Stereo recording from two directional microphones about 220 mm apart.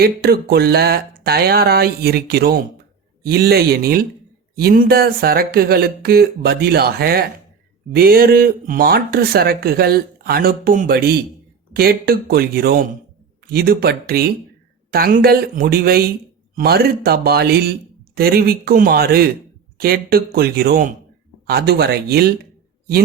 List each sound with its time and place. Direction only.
0.0 s speech: 45° right (ahead or behind)